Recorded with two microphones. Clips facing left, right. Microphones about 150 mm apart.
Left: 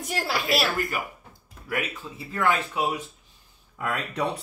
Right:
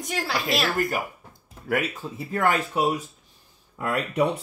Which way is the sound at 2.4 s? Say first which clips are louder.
Right 2 dB; 40° right (ahead or behind).